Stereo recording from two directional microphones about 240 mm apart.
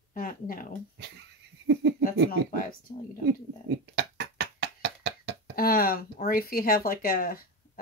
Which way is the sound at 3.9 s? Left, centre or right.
Right.